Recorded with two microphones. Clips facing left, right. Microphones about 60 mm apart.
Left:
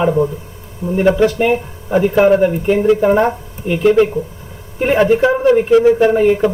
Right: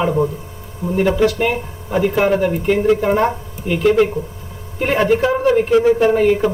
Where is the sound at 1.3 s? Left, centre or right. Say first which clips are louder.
Left 3 dB; centre.